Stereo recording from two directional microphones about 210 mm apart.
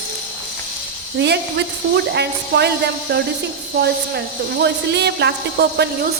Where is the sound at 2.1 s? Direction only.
50° right (ahead or behind).